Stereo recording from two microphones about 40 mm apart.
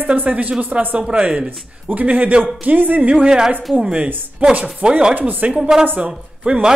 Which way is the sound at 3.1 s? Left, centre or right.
Right.